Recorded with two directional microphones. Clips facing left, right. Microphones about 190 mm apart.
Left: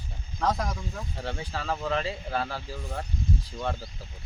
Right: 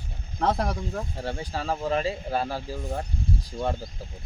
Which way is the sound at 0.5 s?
55° right (ahead or behind).